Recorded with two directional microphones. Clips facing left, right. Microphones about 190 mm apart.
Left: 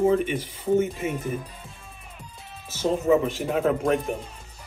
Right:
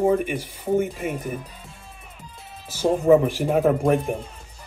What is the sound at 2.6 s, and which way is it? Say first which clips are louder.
Speech: right 4 dB; 10° right (ahead or behind).